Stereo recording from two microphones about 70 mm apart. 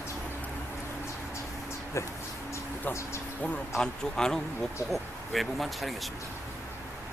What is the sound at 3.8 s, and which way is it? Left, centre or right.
Speech, centre.